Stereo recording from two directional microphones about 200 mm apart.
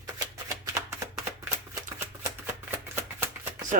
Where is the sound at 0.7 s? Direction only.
15° right (ahead or behind).